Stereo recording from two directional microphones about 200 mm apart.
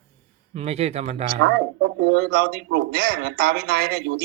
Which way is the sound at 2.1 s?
55° right (ahead or behind).